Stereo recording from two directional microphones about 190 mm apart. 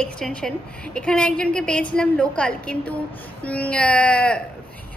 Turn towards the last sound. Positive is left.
turn(degrees=5)  # may be behind; listen again after turning